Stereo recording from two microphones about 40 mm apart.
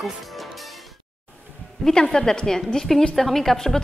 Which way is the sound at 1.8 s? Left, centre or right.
Centre.